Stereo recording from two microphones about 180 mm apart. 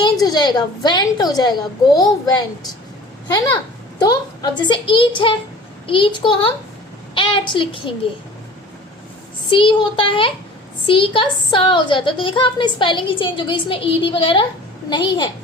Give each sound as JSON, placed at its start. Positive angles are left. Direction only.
{"t": 0.0, "sound": "a woman's voice", "side_deg": 25}
{"t": 4.0, "sound": "a woman's voice", "side_deg": 20}
{"t": 9.5, "sound": "a woman's voice", "side_deg": 30}